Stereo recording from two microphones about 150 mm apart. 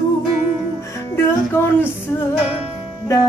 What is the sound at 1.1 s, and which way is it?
Music, 15° left (ahead or behind).